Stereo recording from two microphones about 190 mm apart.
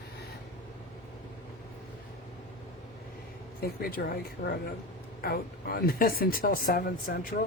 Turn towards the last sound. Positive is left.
turn(degrees=50)  # may be behind; listen again after turning